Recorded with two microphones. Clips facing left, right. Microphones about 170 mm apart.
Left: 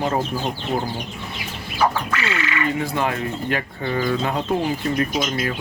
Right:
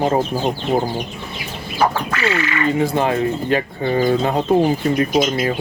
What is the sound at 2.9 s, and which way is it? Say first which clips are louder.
Speech: right 6 dB; 30° right (ahead or behind).